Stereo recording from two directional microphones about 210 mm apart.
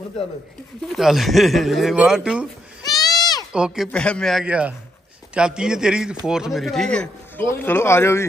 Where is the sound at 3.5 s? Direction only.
5° right (ahead or behind).